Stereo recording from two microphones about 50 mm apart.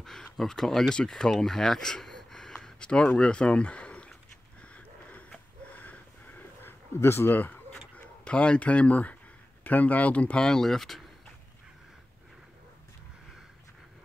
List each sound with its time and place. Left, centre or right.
0.0 s speech: centre; by 4.1 s left
4.6 s a sound: left
7.0 s speech: left
8.2 s speech: left
10.4 s speech: centre